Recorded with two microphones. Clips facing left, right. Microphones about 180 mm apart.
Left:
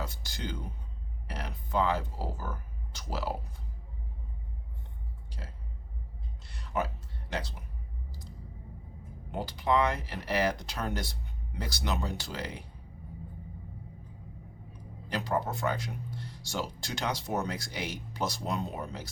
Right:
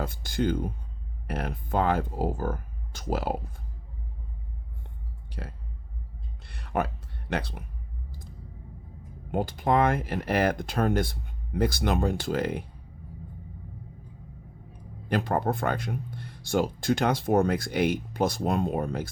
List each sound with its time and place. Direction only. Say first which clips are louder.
0.0 s speech: right 11 dB; 55° right (ahead or behind)
5.3 s speech: right 8 dB; 60° right (ahead or behind)
6.4 s a sound: right 4 dB; 60° right (ahead or behind)
9.3 s speech: right 4 dB; 50° right (ahead or behind)
15.1 s speech: right 5 dB; 55° right (ahead or behind)